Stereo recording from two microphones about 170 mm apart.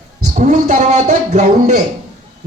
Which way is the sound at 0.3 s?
45° right (ahead or behind).